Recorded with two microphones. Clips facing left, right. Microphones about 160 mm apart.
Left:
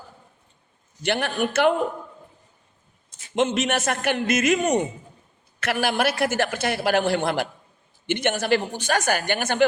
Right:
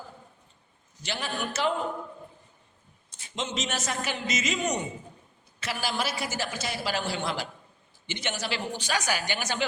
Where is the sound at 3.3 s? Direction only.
60° left (ahead or behind).